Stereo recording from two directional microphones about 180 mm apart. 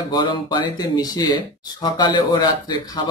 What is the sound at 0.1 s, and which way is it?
Speech, 25° left (ahead or behind).